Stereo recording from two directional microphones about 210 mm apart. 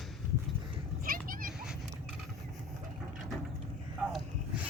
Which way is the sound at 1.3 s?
40° right (ahead or behind).